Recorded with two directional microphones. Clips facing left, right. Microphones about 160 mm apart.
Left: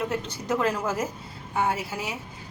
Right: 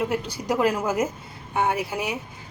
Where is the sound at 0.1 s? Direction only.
10° right (ahead or behind).